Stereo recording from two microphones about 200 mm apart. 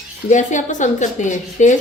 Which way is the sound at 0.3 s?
40° left (ahead or behind).